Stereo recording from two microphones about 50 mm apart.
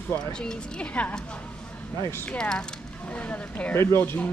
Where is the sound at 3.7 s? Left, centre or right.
Left.